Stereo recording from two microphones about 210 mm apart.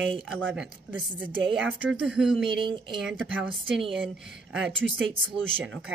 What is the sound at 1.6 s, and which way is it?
Speech, 5° right (ahead or behind).